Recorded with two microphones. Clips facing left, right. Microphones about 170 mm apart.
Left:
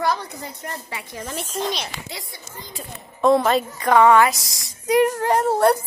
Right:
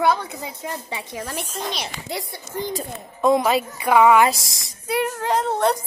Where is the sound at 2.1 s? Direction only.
45° right (ahead or behind).